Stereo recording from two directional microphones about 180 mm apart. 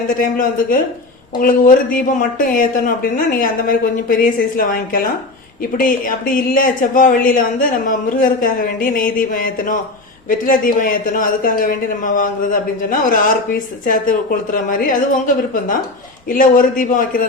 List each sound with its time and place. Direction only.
0.1 s speech: 50° left (ahead or behind)
16.3 s speech: 50° left (ahead or behind)